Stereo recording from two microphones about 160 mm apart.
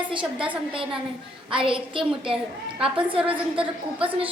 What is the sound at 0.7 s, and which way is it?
A woman's voice, 35° right (ahead or behind).